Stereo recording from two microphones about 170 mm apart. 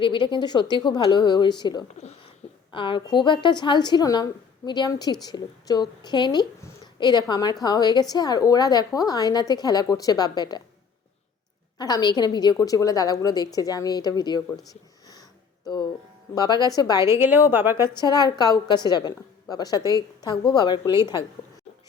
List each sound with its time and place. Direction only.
0.0 s a woman's voice: 30° left (ahead or behind)
11.8 s a woman's voice: 25° left (ahead or behind)
14.7 s a sound: 20° left (ahead or behind)
16.3 s a woman's voice: 25° left (ahead or behind)
17.1 s a woman's voice: 10° right (ahead or behind)
17.8 s a woman's voice: 25° left (ahead or behind)